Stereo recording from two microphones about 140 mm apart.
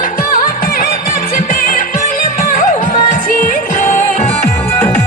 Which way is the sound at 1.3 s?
80° left.